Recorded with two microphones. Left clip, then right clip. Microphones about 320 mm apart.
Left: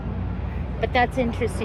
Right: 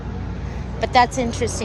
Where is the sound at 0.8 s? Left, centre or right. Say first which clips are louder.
Right 5 dB; centre.